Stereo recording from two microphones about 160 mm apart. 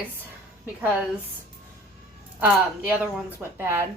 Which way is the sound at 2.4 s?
10° right (ahead or behind).